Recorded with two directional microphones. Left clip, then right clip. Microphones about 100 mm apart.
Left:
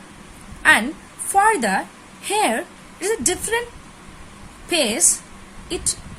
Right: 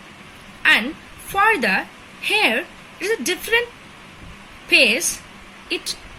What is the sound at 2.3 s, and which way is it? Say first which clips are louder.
A woman's voice: right 2 dB; 60° left (ahead or behind).